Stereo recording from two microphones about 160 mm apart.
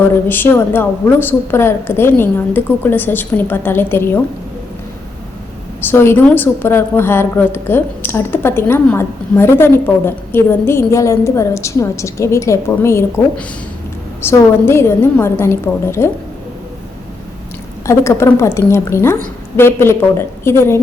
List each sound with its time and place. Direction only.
0.3 s a woman's voice: 15° left (ahead or behind)
5.8 s a woman's voice: 15° left (ahead or behind)
14.2 s a woman's voice: 15° left (ahead or behind)
17.8 s a woman's voice: 20° left (ahead or behind)